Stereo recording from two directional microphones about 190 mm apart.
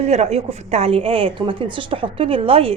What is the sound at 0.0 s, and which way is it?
A woman's voice, 35° right (ahead or behind).